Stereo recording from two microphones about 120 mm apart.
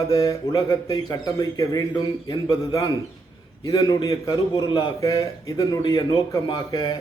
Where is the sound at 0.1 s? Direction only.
25° left (ahead or behind).